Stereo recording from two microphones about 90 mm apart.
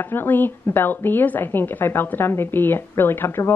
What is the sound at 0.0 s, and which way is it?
A woman's voice, 20° left (ahead or behind).